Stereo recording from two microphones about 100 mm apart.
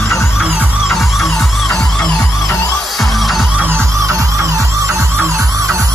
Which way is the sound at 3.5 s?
20° right (ahead or behind).